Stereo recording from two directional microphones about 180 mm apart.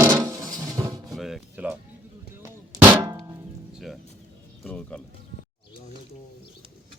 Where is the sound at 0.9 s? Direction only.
Centre (ahead or behind).